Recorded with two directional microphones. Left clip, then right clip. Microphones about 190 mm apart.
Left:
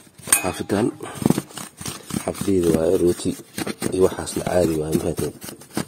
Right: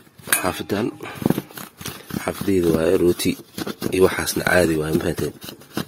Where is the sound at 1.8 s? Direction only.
15° left (ahead or behind).